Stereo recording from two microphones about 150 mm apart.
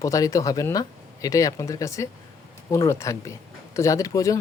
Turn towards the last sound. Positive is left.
turn(degrees=20)  # may be behind; listen again after turning